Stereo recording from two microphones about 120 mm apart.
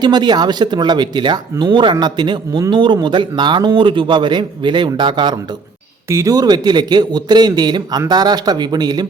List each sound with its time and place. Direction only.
0.0 s speech: 35° right (ahead or behind)
6.1 s speech: 25° right (ahead or behind)